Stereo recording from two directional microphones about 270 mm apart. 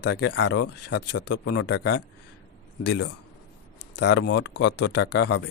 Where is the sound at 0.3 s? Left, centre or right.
Left.